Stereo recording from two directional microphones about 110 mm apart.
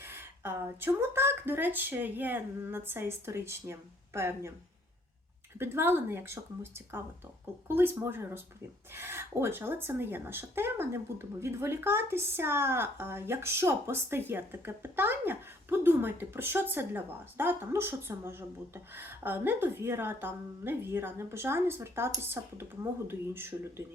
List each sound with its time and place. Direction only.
0.0 s speech: 20° right (ahead or behind)
5.5 s speech: 20° right (ahead or behind)